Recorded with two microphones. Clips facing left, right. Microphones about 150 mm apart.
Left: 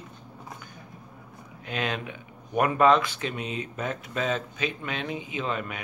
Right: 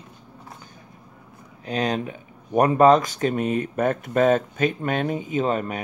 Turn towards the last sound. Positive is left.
turn(degrees=-40)  # may be behind; listen again after turning